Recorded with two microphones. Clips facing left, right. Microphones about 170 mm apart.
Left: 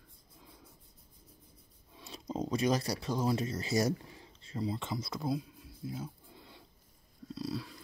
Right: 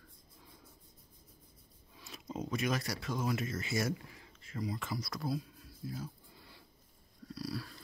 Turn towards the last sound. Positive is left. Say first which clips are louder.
# left 3 dB
turn(degrees=20)  # may be behind; listen again after turning